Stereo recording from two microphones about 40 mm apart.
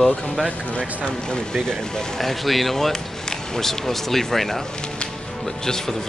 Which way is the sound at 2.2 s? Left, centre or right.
Centre.